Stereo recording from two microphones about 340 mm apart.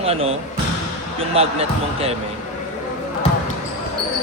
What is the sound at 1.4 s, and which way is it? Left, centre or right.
Speech, centre.